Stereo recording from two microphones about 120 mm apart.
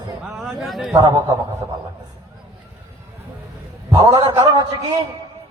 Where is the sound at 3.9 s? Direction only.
35° right (ahead or behind).